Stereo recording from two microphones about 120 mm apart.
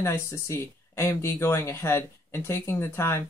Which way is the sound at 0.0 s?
25° left (ahead or behind).